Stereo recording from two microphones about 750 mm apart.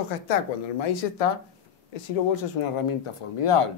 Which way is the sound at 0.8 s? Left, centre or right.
Left.